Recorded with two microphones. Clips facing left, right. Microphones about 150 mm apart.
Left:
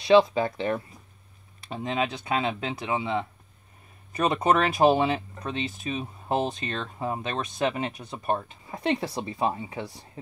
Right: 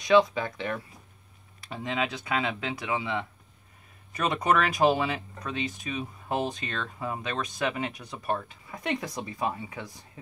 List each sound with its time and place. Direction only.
0.0 s speech: 30° left (ahead or behind)